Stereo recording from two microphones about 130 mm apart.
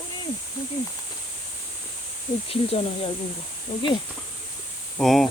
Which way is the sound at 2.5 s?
50° left (ahead or behind).